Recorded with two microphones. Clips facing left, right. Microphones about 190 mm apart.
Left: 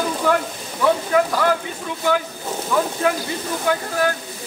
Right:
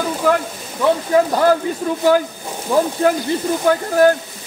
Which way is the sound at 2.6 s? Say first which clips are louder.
Right 5 dB; 35° right (ahead or behind).